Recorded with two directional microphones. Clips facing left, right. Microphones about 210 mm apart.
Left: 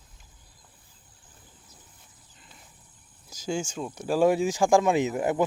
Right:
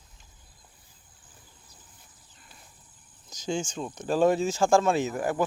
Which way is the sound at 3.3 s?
5° left (ahead or behind).